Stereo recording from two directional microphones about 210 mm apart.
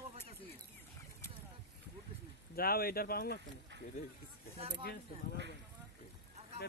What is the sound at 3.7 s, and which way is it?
Duck, 55° right (ahead or behind).